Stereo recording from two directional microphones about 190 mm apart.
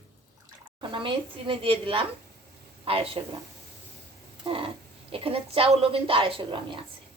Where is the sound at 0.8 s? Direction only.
25° right (ahead or behind).